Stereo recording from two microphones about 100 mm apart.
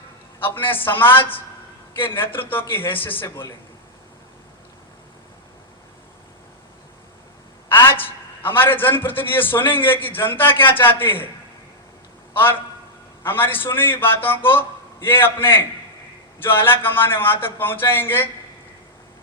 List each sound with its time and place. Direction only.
0.3 s a man's voice: 20° left (ahead or behind)
7.7 s a man's voice: 20° left (ahead or behind)
12.4 s a man's voice: 20° left (ahead or behind)